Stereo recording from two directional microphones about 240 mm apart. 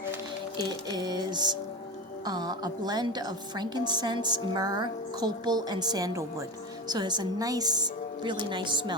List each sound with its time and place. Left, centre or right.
0.5 s a woman's voice: centre